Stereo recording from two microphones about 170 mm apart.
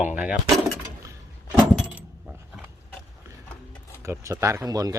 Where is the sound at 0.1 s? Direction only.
10° right (ahead or behind).